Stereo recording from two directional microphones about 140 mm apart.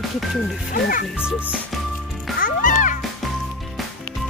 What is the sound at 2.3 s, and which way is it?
Music, 75° left (ahead or behind).